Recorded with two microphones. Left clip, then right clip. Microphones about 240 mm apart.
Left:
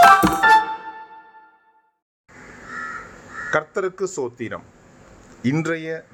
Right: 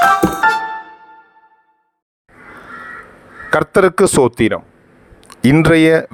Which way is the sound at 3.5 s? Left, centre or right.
Right.